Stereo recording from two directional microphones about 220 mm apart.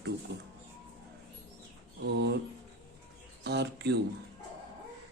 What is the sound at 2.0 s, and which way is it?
Speech, 50° right (ahead or behind).